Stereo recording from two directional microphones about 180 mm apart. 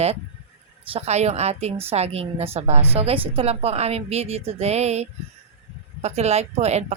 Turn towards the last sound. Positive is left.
turn(degrees=-35)  # may be behind; listen again after turning